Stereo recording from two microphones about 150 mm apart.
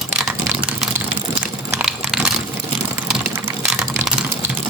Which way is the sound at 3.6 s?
5° right (ahead or behind).